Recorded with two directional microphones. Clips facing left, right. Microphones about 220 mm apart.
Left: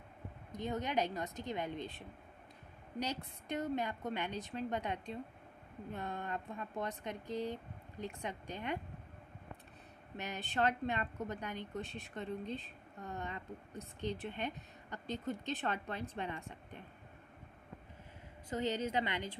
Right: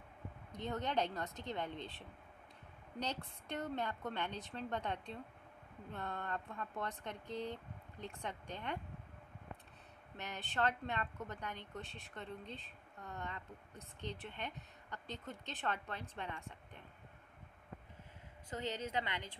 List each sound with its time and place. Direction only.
0.6 s speech: 10° left (ahead or behind)
10.1 s speech: 15° left (ahead or behind)
18.5 s speech: 15° left (ahead or behind)